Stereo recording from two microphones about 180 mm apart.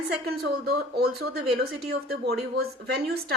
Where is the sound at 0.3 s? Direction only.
60° right (ahead or behind).